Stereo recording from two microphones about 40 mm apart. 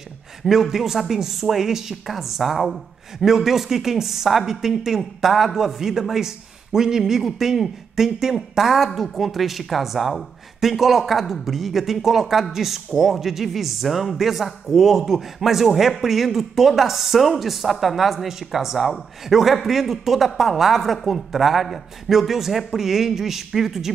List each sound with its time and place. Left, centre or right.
0.4 s speech: centre